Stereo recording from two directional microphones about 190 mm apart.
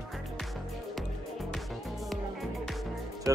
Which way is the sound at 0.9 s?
Centre (ahead or behind).